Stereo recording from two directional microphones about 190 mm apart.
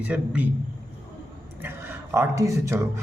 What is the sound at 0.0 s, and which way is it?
Speech, 5° right (ahead or behind).